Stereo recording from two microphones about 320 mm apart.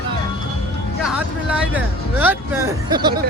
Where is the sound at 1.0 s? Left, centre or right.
Centre.